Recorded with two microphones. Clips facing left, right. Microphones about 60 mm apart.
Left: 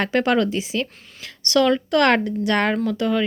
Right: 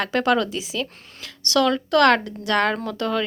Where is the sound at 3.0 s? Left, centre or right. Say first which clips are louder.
Left 2 dB; centre.